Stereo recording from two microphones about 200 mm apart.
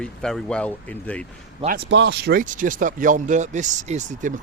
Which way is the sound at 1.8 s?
60° right (ahead or behind).